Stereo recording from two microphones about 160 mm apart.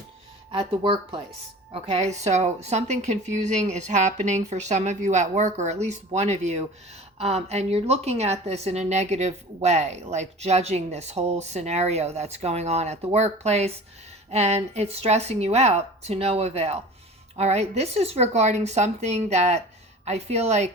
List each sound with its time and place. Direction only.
0.5 s a woman's voice: 35° right (ahead or behind)